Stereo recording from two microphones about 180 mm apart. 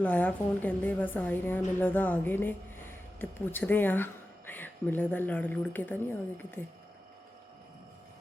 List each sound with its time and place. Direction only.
0.0 s a woman's voice: 10° left (ahead or behind)